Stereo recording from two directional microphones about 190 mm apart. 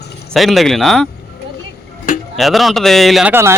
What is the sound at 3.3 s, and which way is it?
Speech, 15° right (ahead or behind).